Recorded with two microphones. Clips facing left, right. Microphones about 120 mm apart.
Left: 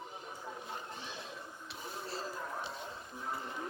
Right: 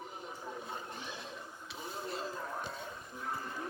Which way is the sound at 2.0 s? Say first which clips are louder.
Right 2 dB; 35° left (ahead or behind).